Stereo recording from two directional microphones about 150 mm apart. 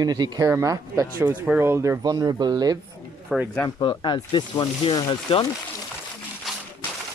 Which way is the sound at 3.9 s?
30° left (ahead or behind).